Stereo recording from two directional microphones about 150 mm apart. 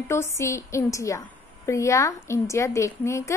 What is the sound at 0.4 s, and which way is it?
A woman's voice, 20° left (ahead or behind).